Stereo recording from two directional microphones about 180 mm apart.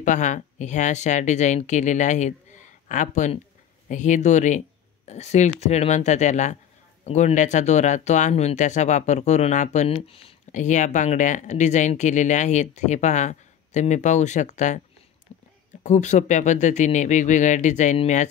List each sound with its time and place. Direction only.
0.0 s speech: 45° left (ahead or behind)
15.3 s a sound: 35° left (ahead or behind)
15.8 s speech: 40° left (ahead or behind)